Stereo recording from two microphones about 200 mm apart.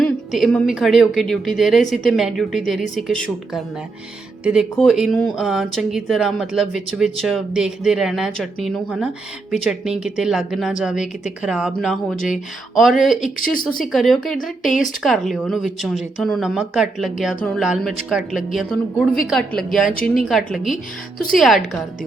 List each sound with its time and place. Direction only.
0.0 s a woman's voice: centre (ahead or behind)
4.8 s a woman's voice: centre (ahead or behind)
13.4 s speech: 45° left (ahead or behind)
13.9 s a woman's voice: centre (ahead or behind)